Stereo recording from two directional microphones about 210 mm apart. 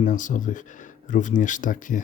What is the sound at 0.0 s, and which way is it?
Speech, 35° left (ahead or behind).